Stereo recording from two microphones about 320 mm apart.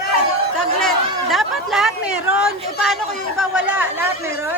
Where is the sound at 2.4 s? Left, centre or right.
Centre.